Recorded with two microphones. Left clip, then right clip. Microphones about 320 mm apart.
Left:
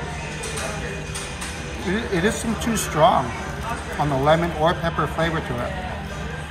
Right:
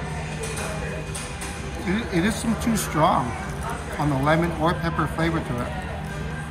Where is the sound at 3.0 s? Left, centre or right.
Centre.